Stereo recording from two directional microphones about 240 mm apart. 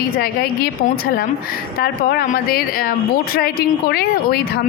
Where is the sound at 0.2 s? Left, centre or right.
Left.